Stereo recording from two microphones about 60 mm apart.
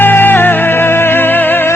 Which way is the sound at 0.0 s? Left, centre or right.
Left.